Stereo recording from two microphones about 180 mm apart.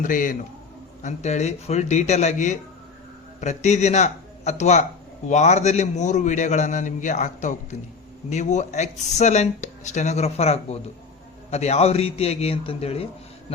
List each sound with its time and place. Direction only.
0.0 s a man's voice: 45° left (ahead or behind)